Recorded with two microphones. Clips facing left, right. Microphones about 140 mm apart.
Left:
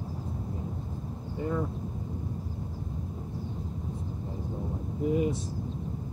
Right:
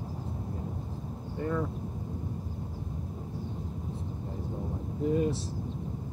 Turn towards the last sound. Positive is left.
turn(degrees=15)  # may be behind; listen again after turning